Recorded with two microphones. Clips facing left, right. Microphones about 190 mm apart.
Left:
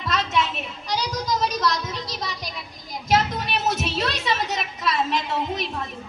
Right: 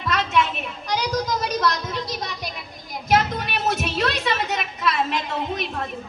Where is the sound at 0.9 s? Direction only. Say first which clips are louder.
Right 2 dB; 55° right (ahead or behind).